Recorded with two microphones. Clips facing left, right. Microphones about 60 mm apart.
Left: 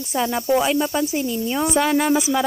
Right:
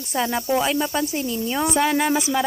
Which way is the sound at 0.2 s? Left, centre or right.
Centre.